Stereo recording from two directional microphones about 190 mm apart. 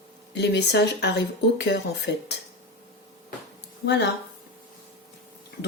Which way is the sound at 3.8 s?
60° left (ahead or behind).